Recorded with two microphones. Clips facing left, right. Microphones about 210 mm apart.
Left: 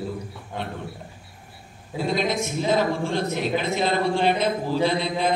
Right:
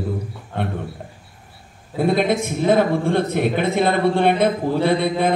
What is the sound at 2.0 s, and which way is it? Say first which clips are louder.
A man's voice: right 6 dB; 55° right (ahead or behind).